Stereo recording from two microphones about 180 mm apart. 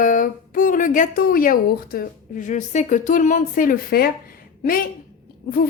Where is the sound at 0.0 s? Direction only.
45° left (ahead or behind).